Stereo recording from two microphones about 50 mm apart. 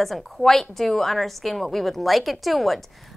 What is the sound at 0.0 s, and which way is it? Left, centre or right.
A woman's voice, centre.